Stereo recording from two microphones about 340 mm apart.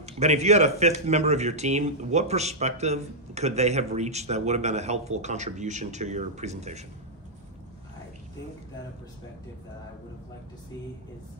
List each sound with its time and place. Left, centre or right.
0.0 s speech: centre